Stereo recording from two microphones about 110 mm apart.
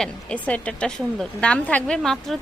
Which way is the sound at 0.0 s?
10° left (ahead or behind).